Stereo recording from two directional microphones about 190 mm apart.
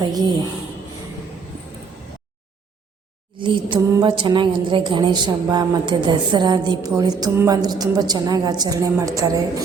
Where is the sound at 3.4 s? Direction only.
25° right (ahead or behind).